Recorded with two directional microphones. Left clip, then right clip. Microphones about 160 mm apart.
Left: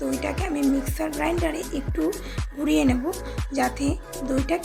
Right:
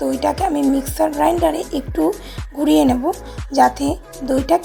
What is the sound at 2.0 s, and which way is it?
Speech, centre (ahead or behind).